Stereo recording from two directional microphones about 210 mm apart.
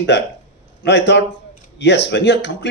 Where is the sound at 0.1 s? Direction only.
55° left (ahead or behind).